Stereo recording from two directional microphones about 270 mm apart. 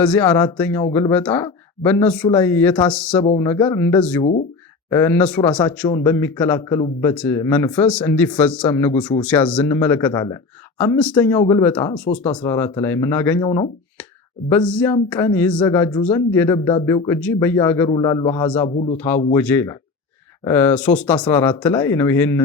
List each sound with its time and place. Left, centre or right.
0.0 s speech: centre
4.2 s speech: left
4.9 s speech: centre
9.2 s speech: centre